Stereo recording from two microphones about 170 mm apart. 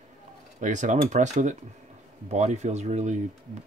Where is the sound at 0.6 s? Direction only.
45° right (ahead or behind).